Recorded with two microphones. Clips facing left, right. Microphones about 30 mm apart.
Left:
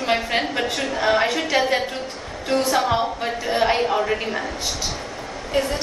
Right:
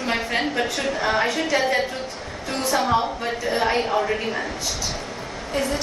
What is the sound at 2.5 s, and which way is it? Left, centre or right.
Speech, centre.